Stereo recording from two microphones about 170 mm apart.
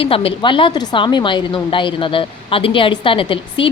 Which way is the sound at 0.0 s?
35° left (ahead or behind).